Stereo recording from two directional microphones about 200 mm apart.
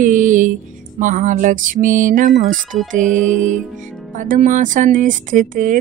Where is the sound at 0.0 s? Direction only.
40° right (ahead or behind).